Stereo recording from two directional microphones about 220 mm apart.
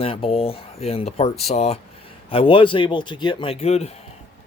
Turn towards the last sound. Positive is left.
turn(degrees=30)  # may be behind; listen again after turning